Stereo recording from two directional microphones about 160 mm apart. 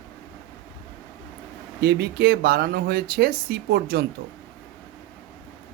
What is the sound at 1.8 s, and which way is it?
Speech, 80° right.